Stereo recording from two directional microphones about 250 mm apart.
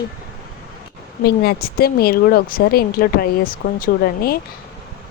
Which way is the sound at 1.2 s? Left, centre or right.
Left.